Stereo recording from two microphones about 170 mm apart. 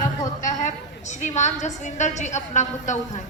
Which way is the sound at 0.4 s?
45° left (ahead or behind).